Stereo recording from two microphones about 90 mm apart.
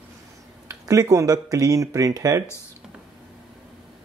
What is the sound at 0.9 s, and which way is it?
Speech, 40° right (ahead or behind).